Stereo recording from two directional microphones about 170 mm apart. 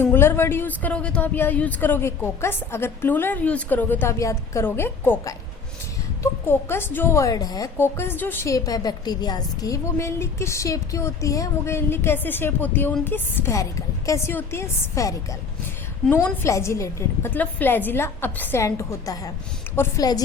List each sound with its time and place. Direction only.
0.0 s a woman's voice: 15° left (ahead or behind)